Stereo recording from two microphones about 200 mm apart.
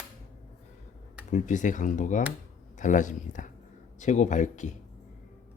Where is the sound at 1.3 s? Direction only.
40° left (ahead or behind).